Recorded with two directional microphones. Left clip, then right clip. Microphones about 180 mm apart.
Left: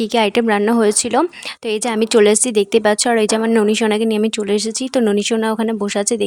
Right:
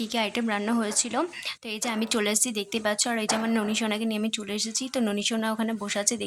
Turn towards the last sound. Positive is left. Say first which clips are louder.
# left 11 dB
turn(degrees=40)  # may be behind; listen again after turning